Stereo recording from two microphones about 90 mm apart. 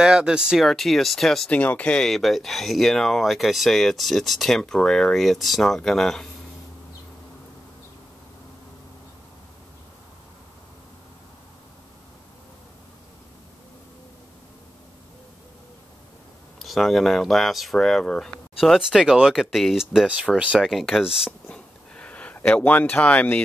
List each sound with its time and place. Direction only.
0.0 s speech: 10° right (ahead or behind)
1.5 s speech: 15° left (ahead or behind)
16.5 s speech: centre (ahead or behind)
20.5 s speech: centre (ahead or behind)
21.3 s a sound: 15° left (ahead or behind)